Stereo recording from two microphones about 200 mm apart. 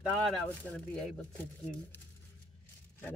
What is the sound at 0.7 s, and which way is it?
A woman's voice, 10° left (ahead or behind).